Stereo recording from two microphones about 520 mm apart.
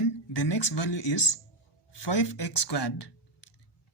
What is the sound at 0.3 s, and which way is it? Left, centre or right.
Speech, left.